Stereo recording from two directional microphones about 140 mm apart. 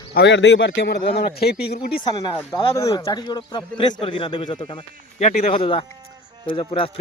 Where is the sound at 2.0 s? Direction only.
25° left (ahead or behind).